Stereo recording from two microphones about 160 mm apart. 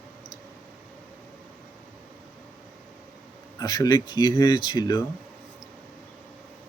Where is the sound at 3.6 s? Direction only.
25° left (ahead or behind).